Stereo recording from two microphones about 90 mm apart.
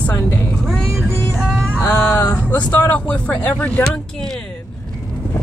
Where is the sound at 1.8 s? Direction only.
20° left (ahead or behind).